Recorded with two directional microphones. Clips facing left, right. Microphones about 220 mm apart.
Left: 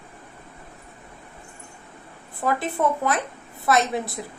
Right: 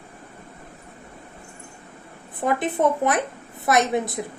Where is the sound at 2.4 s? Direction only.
20° right (ahead or behind).